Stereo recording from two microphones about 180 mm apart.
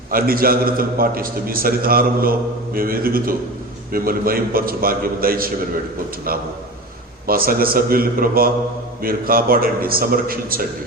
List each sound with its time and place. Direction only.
0.1 s a man's voice: 55° right (ahead or behind)
7.3 s a man's voice: 55° right (ahead or behind)